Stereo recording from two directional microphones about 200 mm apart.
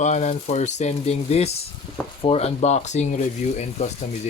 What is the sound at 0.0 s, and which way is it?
Speech, 35° left (ahead or behind).